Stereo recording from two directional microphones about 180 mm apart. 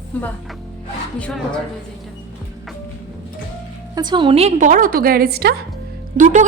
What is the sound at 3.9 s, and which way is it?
Speech, 25° right (ahead or behind).